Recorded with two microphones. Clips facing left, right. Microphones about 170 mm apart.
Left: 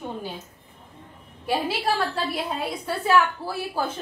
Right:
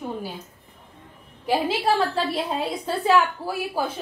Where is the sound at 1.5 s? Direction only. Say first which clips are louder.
Right 3 dB; 20° right (ahead or behind).